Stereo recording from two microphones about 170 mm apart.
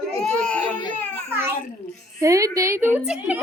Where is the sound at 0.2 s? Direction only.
5° left (ahead or behind).